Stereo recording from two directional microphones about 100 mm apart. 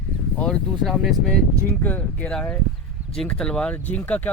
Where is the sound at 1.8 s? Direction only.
15° left (ahead or behind).